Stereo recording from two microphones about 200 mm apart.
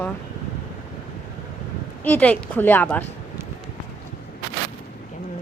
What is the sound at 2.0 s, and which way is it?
Speech, 10° left (ahead or behind).